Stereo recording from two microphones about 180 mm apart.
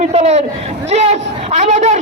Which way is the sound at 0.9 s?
35° right (ahead or behind).